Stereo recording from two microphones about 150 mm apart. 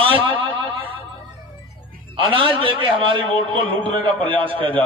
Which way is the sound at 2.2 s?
35° right (ahead or behind).